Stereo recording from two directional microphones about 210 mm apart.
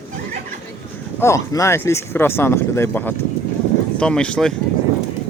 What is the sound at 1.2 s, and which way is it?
Speech, 15° left (ahead or behind).